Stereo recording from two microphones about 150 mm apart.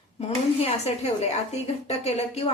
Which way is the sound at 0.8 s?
45° left (ahead or behind).